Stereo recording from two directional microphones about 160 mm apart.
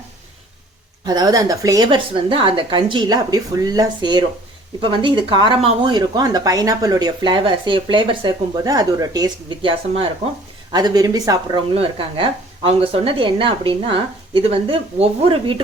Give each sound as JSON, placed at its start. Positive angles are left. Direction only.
{"t": 1.0, "sound": "speech", "side_deg": -25}
{"t": 11.7, "sound": "speech", "side_deg": -35}